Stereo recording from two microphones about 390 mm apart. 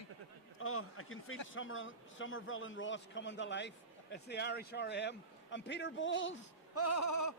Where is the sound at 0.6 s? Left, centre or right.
Left.